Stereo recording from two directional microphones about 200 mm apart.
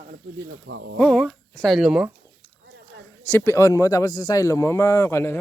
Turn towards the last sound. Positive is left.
turn(degrees=15)  # may be behind; listen again after turning